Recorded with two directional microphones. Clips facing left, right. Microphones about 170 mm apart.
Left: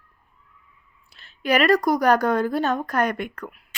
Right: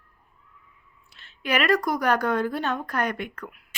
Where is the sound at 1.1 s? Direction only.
35° left (ahead or behind).